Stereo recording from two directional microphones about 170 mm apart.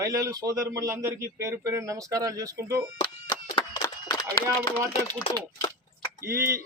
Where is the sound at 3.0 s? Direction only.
25° left (ahead or behind).